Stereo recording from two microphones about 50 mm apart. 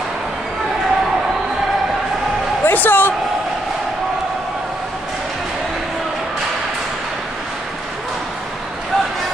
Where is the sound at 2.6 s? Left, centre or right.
Left.